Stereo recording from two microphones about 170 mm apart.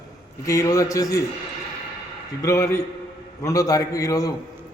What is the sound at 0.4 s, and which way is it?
Speech, 20° left (ahead or behind).